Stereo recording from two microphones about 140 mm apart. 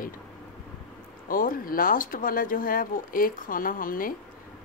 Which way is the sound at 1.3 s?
90° left.